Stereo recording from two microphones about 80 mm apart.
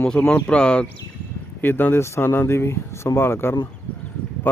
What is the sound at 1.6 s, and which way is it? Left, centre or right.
Speech, left.